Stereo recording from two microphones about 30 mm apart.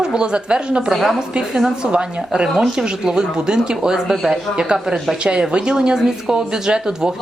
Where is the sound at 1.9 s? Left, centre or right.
Right.